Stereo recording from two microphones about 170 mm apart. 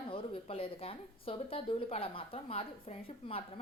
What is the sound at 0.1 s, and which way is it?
A woman's voice, 35° left (ahead or behind).